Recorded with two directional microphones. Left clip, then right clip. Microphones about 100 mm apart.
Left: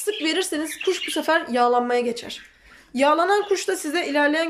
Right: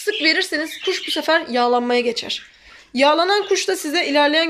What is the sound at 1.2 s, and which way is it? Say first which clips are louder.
A woman's voice: right 2 dB; 15° left (ahead or behind).